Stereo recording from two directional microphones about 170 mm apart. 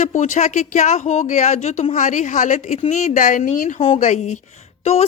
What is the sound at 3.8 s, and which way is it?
Speech, 40° left (ahead or behind).